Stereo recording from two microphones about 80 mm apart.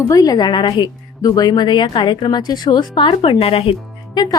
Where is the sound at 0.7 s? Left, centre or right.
Left.